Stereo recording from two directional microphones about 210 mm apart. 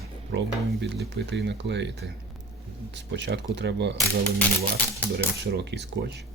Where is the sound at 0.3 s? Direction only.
55° right (ahead or behind).